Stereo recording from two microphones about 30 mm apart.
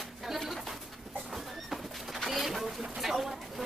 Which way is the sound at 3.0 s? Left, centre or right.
Centre.